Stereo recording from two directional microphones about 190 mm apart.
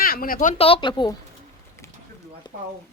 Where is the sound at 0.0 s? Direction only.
50° left (ahead or behind).